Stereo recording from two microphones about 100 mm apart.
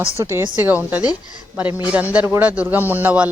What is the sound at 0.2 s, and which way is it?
Speech, 25° right (ahead or behind).